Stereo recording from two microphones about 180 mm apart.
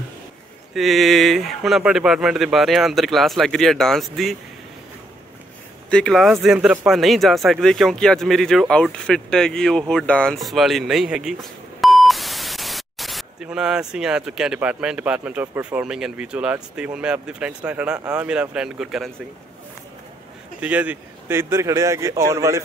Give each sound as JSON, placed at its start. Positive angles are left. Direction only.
{"t": 0.7, "sound": "speech", "side_deg": 0}
{"t": 5.9, "sound": "speech", "side_deg": 5}
{"t": 20.6, "sound": "speech", "side_deg": -10}